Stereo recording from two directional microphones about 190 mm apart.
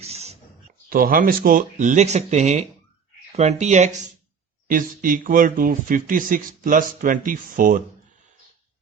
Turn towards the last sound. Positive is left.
turn(degrees=-45)  # may be behind; listen again after turning